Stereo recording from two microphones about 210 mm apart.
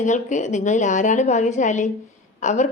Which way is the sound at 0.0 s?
35° left (ahead or behind).